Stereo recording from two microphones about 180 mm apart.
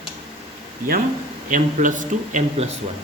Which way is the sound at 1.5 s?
45° right (ahead or behind).